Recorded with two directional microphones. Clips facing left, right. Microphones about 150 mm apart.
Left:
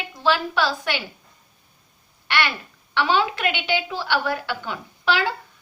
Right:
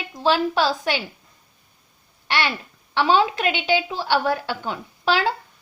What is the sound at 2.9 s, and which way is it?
A woman's voice, 35° right (ahead or behind).